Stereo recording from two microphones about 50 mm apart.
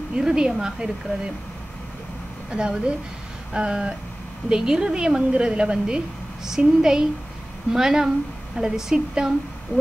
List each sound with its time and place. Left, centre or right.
0.1 s a woman's voice: centre
2.5 s a woman's voice: centre
3.5 s a sound: right
4.5 s a woman's voice: centre